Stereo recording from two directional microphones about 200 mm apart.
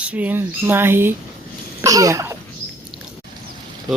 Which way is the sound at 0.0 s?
5° right (ahead or behind).